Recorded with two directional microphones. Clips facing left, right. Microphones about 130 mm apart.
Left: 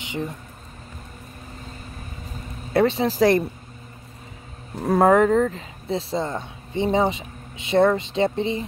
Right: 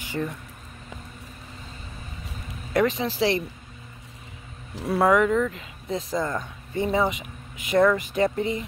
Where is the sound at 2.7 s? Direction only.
30° left (ahead or behind); by 3.4 s 45° left (ahead or behind).